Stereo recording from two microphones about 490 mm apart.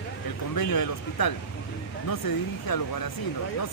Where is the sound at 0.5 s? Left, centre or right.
Left.